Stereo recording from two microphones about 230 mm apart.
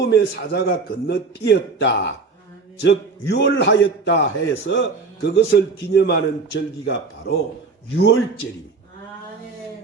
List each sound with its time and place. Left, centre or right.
0.1 s a man's voice: left